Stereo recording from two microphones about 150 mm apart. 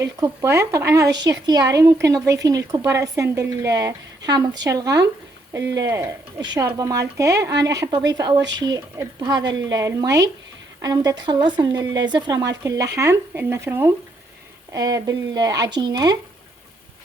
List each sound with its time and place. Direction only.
0.0 s speech: 20° right (ahead or behind)
6.4 s speech: 30° right (ahead or behind)